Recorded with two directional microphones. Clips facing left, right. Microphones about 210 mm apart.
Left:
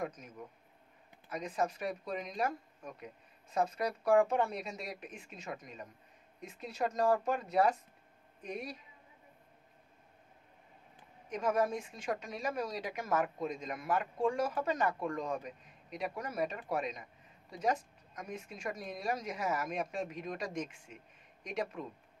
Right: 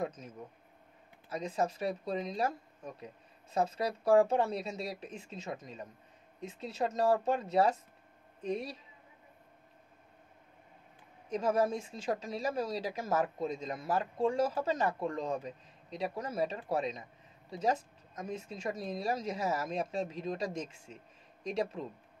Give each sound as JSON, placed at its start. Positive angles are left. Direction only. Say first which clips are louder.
{"t": 1.3, "sound": "speech", "louder": "right 2 dB", "side_deg": -25}
{"t": 11.2, "sound": "speech", "louder": "right 2 dB", "side_deg": -30}